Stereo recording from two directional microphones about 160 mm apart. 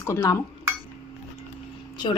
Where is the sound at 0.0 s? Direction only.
15° left (ahead or behind).